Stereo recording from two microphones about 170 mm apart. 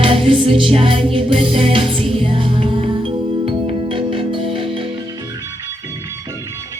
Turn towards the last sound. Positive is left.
turn(degrees=-30)  # may be behind; listen again after turning